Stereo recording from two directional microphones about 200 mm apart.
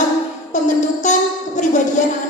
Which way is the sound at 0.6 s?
40° left (ahead or behind).